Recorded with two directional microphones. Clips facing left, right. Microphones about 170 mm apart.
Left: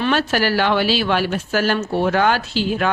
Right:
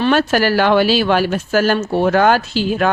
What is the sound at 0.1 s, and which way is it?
Speech, 45° right (ahead or behind).